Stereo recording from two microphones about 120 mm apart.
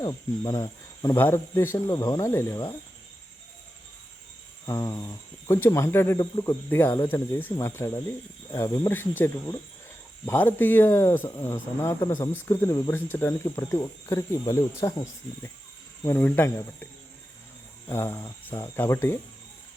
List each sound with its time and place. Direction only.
0.0 s speech: 30° left (ahead or behind)
1.0 s speech: 20° left (ahead or behind)
4.6 s speech: 30° left (ahead or behind)
6.7 s speech: 20° left (ahead or behind)
9.0 s speech: 15° left (ahead or behind)
16.0 s speech: 20° left (ahead or behind)